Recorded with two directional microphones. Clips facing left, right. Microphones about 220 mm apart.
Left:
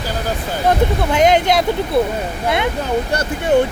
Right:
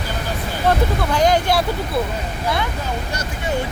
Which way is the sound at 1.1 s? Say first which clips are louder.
Left 3 dB; 20° left (ahead or behind).